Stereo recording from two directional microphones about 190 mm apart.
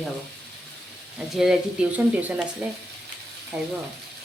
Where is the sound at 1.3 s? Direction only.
Centre (ahead or behind).